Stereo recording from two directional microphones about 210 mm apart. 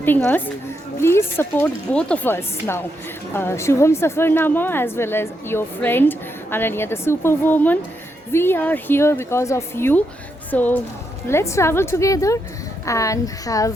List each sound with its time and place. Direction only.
0.0 s a woman's voice: 10° left (ahead or behind)